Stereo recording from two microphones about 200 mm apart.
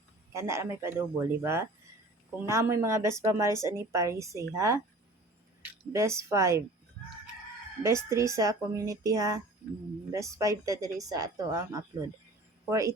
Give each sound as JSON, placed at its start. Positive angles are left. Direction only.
{"t": 0.3, "sound": "a woman's voice", "side_deg": -15}
{"t": 5.9, "sound": "a woman's voice", "side_deg": -15}
{"t": 7.8, "sound": "a woman's voice", "side_deg": -15}